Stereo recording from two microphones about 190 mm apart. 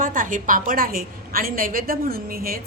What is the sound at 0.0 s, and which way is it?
A woman's voice, 45° right (ahead or behind).